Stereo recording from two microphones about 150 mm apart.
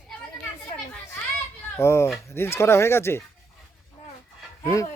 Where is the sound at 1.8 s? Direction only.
20° left (ahead or behind).